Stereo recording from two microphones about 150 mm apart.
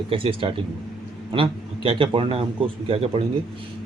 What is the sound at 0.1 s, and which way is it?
Speech, 35° right (ahead or behind).